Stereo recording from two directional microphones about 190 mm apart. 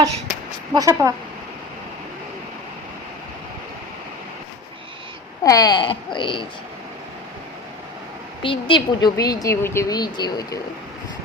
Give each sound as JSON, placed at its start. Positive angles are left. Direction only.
{"t": 0.7, "sound": "a woman's voice", "side_deg": -20}
{"t": 5.4, "sound": "a woman's voice", "side_deg": 20}
{"t": 8.4, "sound": "a woman's voice", "side_deg": 25}